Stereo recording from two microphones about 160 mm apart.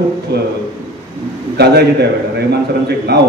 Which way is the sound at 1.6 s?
90° right.